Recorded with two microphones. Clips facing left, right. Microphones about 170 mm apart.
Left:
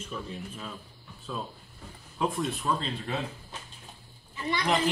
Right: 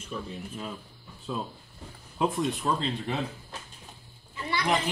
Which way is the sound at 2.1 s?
20° right (ahead or behind).